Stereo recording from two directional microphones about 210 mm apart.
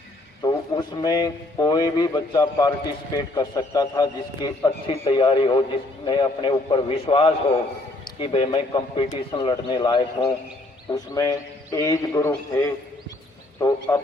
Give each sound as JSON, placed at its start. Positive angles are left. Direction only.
{"t": 0.4, "sound": "a man's voice", "side_deg": 20}